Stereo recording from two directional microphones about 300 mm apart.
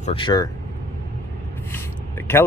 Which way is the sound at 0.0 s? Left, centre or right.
Centre.